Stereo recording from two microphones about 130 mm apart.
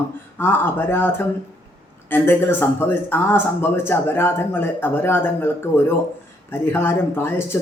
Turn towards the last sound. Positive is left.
turn(degrees=20)  # may be behind; listen again after turning